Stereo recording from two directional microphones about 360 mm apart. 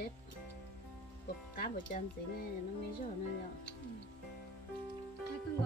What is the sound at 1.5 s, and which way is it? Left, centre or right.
Speech, left.